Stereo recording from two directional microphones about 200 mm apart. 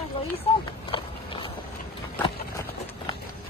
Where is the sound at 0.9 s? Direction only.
25° left (ahead or behind).